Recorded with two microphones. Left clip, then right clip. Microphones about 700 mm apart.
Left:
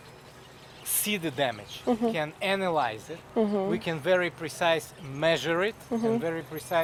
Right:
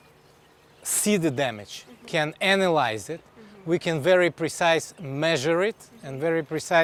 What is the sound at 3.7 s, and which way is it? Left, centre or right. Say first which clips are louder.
Speech: right 5 dB; right.